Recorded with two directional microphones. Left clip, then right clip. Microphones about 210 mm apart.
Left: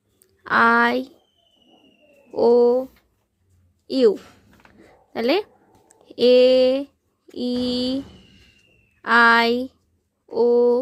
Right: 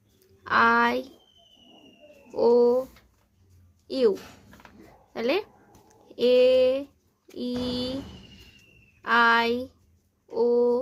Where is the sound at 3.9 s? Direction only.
30° left (ahead or behind).